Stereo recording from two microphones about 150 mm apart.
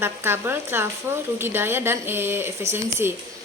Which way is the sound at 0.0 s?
15° right (ahead or behind).